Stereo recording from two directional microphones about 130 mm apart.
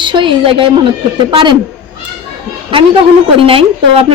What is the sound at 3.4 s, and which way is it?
Speech, 45° right (ahead or behind).